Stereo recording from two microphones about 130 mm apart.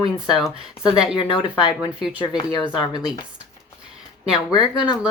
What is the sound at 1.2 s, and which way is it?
Speech, 40° left (ahead or behind).